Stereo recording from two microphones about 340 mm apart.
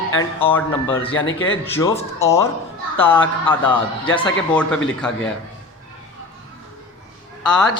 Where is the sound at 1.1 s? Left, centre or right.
Left.